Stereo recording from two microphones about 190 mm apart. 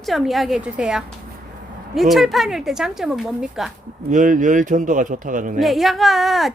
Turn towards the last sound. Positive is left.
turn(degrees=0)  # may be behind; listen again after turning